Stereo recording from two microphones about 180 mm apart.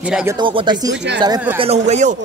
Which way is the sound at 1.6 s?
35° right (ahead or behind).